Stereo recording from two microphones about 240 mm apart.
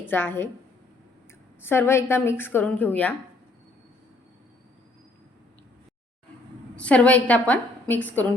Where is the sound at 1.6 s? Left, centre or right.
Centre.